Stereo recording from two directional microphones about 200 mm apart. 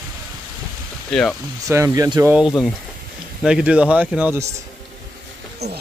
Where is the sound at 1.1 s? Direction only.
5° left (ahead or behind).